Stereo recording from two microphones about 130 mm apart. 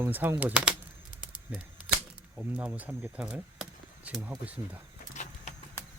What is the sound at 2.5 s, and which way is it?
Speech, 10° right (ahead or behind).